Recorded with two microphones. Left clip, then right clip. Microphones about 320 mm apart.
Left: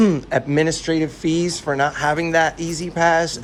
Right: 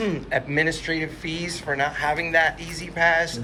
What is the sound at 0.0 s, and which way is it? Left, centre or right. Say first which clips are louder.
Speech: left 6 dB; left.